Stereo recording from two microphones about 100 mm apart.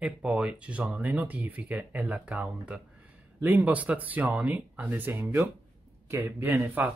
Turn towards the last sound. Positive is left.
turn(degrees=-15)  # may be behind; listen again after turning